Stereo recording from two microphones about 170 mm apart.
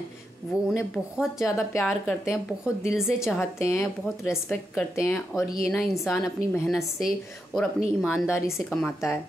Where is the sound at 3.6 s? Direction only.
15° left (ahead or behind).